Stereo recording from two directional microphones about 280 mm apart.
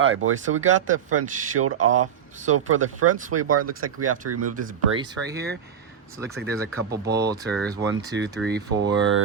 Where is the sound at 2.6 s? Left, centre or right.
Right.